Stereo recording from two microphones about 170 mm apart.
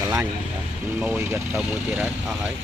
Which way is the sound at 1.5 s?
5° right (ahead or behind).